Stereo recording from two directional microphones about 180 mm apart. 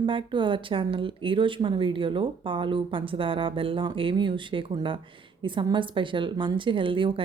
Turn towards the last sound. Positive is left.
turn(degrees=-30)  # may be behind; listen again after turning